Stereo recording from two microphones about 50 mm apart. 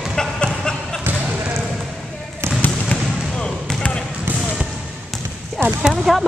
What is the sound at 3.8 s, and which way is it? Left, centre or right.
Basketball bounce, left.